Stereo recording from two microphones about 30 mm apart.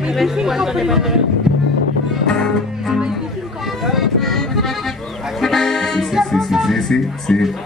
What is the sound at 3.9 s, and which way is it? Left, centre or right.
Music, centre.